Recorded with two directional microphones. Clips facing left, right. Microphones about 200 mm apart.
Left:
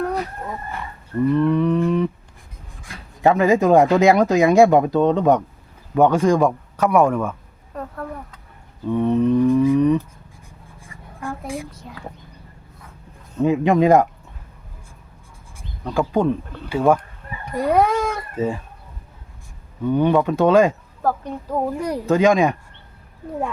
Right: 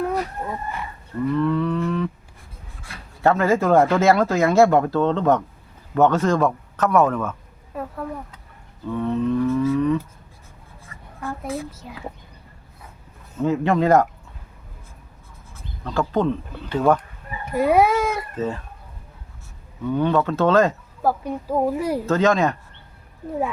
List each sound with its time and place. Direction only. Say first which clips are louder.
1.3 s livestock: left 3 dB; 15° left (ahead or behind)
2.8 s speech: left 2 dB; 15° left (ahead or behind)
7.7 s a sound: right 1 dB; 5° right (ahead or behind)
8.9 s speech: left 5 dB; 20° left (ahead or behind)
10.8 s a sound: left 1 dB; 15° left (ahead or behind)
11.7 s a child's voice: right 1 dB; 5° right (ahead or behind)
13.4 s speech: left 3 dB; 15° left (ahead or behind)
15.5 s speech: left 2 dB; 15° left (ahead or behind)
17.4 s a woman's voice: right 1 dB; 5° right (ahead or behind)
18.3 s speech: left 3 dB; 10° left (ahead or behind)
19.9 s speech: left 3 dB; 15° left (ahead or behind)
21.0 s a woman's voice: right 1 dB; 10° right (ahead or behind)
22.0 s speech: left 4 dB; 15° left (ahead or behind)